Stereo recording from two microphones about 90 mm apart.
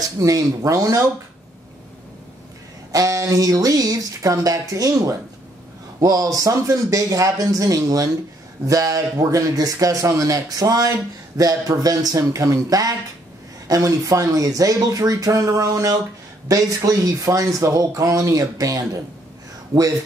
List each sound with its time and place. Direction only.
0.2 s speech: 40° right (ahead or behind)
2.9 s speech: 40° right (ahead or behind)